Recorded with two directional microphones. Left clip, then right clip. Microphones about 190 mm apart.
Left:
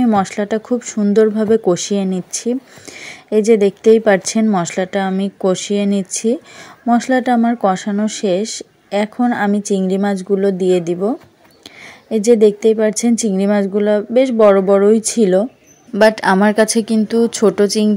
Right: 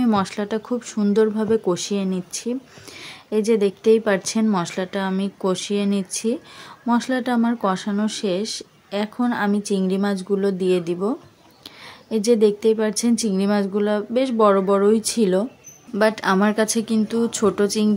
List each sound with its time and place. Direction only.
0.0 s speech: 20° left (ahead or behind)